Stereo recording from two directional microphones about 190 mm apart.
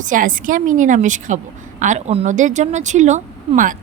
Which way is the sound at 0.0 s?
45° right (ahead or behind).